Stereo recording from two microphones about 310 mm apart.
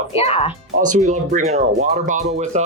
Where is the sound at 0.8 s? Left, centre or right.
Right.